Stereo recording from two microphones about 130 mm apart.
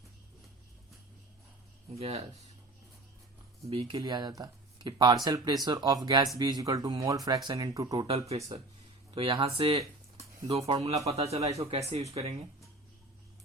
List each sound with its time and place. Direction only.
2.0 s speech: 50° right (ahead or behind)
3.7 s speech: 50° right (ahead or behind)
3.9 s speech: 30° right (ahead or behind)
8.0 s speech: 50° right (ahead or behind)